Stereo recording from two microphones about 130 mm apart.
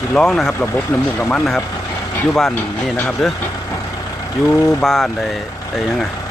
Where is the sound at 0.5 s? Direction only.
15° left (ahead or behind).